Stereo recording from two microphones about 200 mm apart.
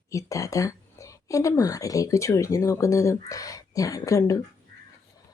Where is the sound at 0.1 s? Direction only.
15° left (ahead or behind).